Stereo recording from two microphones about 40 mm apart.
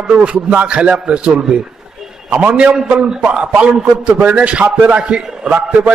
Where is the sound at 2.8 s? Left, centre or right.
Right.